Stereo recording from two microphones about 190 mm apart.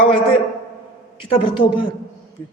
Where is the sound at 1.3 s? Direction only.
25° left (ahead or behind).